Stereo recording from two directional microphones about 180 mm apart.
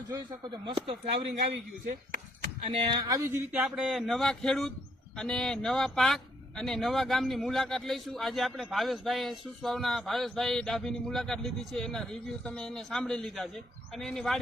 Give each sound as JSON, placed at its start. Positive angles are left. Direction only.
{"t": 0.1, "sound": "speech", "side_deg": -25}
{"t": 2.7, "sound": "a man's voice", "side_deg": -25}